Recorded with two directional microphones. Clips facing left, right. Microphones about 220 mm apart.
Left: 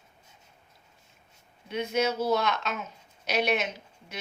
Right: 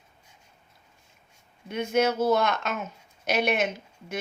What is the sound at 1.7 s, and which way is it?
Speech, 50° right (ahead or behind).